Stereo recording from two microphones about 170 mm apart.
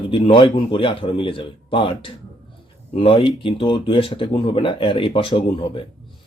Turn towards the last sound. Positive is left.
turn(degrees=30)  # may be behind; listen again after turning